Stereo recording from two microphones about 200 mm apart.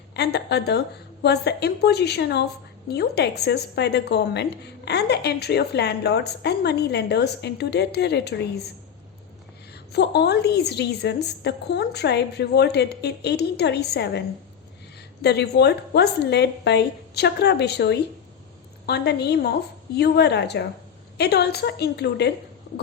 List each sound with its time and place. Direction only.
0.2 s a woman's voice: 55° left (ahead or behind)
9.9 s a woman's voice: 55° left (ahead or behind)
15.2 s a woman's voice: 55° left (ahead or behind)